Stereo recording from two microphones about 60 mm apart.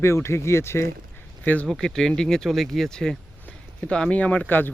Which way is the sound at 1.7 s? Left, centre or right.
Centre.